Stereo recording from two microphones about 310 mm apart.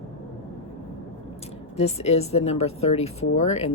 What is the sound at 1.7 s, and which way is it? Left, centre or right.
Speech, left.